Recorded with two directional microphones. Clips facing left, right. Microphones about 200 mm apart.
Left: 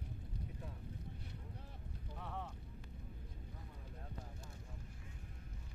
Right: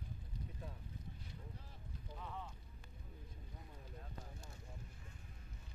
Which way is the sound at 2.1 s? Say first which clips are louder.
Left 3 dB; 65° left (ahead or behind).